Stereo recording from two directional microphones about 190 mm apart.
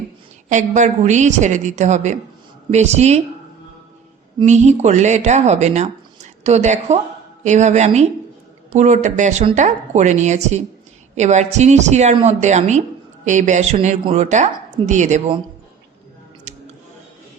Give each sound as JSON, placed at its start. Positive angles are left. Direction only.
{"t": 0.4, "sound": "a woman's voice", "side_deg": -40}
{"t": 4.4, "sound": "a woman's voice", "side_deg": -35}
{"t": 16.5, "sound": "music", "side_deg": -35}